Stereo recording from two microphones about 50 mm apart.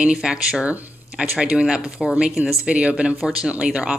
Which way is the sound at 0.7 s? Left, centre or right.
Right.